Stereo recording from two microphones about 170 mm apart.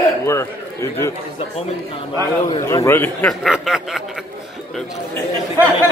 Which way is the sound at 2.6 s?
15° left (ahead or behind).